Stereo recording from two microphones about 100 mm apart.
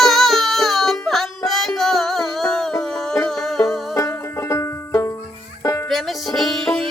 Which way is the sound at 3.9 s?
30° left (ahead or behind).